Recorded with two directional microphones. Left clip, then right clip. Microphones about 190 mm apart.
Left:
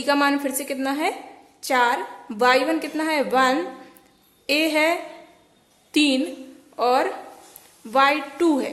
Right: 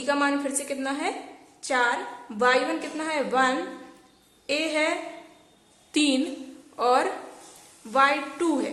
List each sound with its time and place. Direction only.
0.0 s a woman's voice: 25° left (ahead or behind)
5.9 s a woman's voice: 15° left (ahead or behind)